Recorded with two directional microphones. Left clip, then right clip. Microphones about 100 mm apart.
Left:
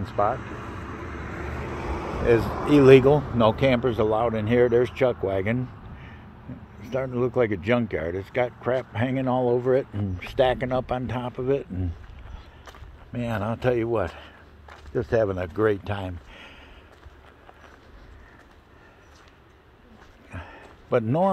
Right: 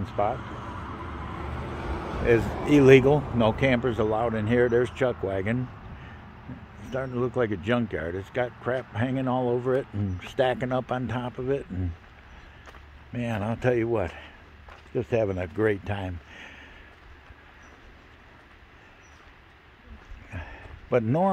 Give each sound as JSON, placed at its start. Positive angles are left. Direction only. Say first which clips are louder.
{"t": 0.0, "sound": "vehicle", "louder": "left 3 dB", "side_deg": -20}
{"t": 2.7, "sound": "speech", "louder": "left 2 dB", "side_deg": -25}
{"t": 3.3, "sound": "speech", "louder": "left 3 dB", "side_deg": -5}
{"t": 10.6, "sound": "speech", "louder": "left 2 dB", "side_deg": -25}
{"t": 13.1, "sound": "speech", "louder": "left 2 dB", "side_deg": -15}
{"t": 13.5, "sound": "speech", "louder": "left 1 dB", "side_deg": -35}
{"t": 13.8, "sound": "speech", "louder": "left 2 dB", "side_deg": -25}
{"t": 16.3, "sound": "a sound", "louder": "right 1 dB", "side_deg": -35}
{"t": 20.2, "sound": "a sound", "louder": "even", "side_deg": -20}